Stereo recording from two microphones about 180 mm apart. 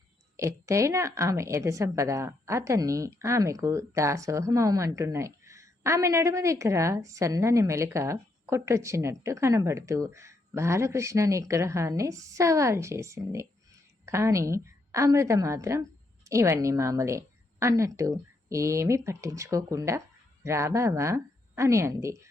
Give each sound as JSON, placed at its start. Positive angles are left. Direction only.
{"t": 0.3, "sound": "a woman's voice", "side_deg": -15}